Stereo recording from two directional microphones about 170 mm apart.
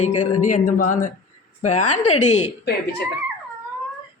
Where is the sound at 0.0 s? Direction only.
45° left (ahead or behind).